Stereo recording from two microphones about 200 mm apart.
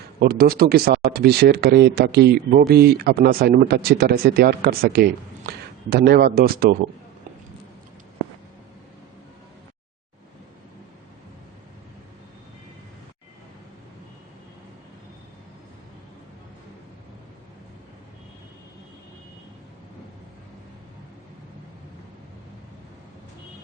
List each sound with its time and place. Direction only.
0.2 s speech: 50° right (ahead or behind)